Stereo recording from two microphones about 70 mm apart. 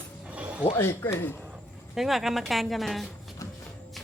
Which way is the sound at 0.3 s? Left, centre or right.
Centre.